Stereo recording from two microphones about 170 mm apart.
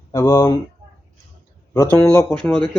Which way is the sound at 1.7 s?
15° left (ahead or behind).